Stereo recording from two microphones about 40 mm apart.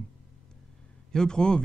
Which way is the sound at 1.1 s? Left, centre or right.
Centre.